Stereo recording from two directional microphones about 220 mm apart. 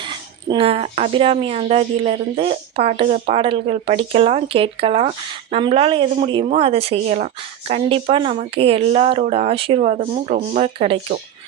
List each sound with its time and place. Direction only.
0.0 s speech: 20° right (ahead or behind)